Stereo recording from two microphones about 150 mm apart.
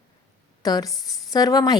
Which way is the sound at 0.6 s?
25° left (ahead or behind).